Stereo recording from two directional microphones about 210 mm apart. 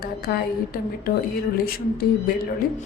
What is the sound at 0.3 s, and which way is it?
Speech, 50° left (ahead or behind).